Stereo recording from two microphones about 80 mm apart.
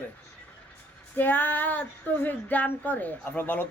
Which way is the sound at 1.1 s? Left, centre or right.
Left.